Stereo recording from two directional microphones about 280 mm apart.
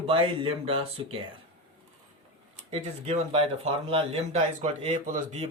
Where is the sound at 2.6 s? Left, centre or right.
Right.